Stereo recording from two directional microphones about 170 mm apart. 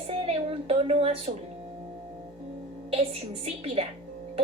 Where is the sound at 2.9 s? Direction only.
35° right (ahead or behind).